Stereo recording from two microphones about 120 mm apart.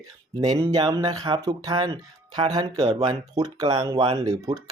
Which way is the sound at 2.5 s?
40° right (ahead or behind).